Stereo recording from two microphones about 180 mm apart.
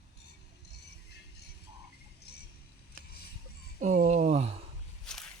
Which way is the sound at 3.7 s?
45° right (ahead or behind).